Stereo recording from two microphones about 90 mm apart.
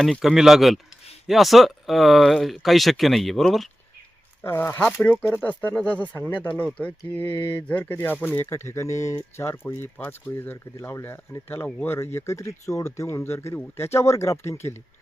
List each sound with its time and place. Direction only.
0.0 s speech: centre (ahead or behind)
4.4 s speech: 25° left (ahead or behind)